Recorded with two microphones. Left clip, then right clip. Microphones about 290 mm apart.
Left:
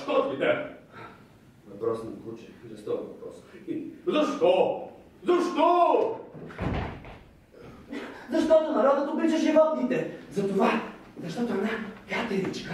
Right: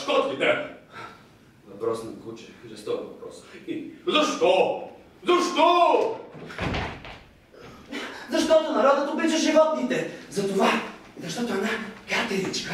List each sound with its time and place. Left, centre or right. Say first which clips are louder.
0.0 s a sound: right 3 dB; centre
1.8 s a man's voice: right 2 dB; centre
4.1 s a man's voice: right 2 dB; centre